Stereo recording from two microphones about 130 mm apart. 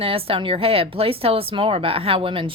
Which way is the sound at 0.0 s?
45° right (ahead or behind).